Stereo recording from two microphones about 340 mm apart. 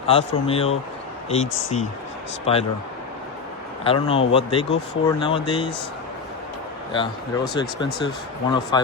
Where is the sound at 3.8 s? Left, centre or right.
Centre.